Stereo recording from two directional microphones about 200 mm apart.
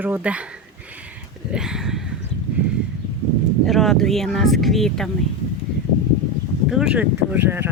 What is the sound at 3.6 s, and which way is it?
Speech, centre (ahead or behind).